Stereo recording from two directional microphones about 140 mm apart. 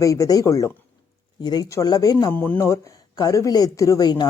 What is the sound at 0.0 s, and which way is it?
Speech, 25° left (ahead or behind).